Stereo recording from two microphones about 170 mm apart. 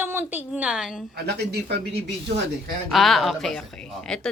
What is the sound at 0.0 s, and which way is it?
A woman's voice, 10° right (ahead or behind).